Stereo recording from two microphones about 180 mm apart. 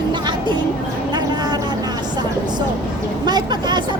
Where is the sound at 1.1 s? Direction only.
25° right (ahead or behind).